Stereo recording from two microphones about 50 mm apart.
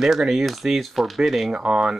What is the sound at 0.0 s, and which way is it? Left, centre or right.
Speech, centre.